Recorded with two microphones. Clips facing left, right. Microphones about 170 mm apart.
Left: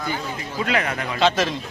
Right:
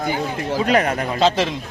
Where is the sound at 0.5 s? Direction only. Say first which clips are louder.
Right 6 dB; 40° right (ahead or behind).